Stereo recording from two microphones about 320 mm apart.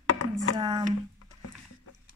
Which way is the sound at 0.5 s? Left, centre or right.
Centre.